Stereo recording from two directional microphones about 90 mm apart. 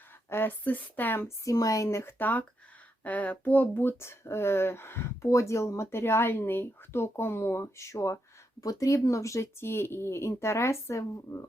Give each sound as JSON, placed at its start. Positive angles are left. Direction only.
{"t": 0.3, "sound": "speech", "side_deg": 25}
{"t": 1.5, "sound": "speech", "side_deg": 40}